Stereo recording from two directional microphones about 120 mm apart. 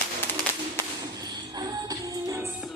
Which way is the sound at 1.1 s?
35° right (ahead or behind).